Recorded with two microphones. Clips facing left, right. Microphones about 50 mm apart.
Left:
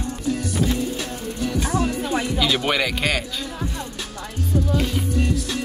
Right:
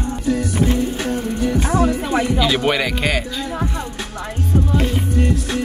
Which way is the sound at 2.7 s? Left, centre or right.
Centre.